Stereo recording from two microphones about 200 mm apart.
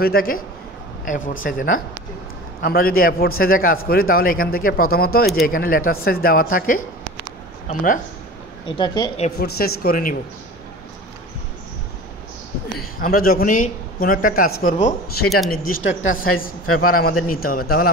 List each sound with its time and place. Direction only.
0.0 s speech: 45° left (ahead or behind)
8.6 s speech: 20° left (ahead or behind)
9.4 s speech: 50° left (ahead or behind)
12.7 s speech: 45° left (ahead or behind)
16.6 s a man's voice: 90° left
17.3 s speech: 45° left (ahead or behind)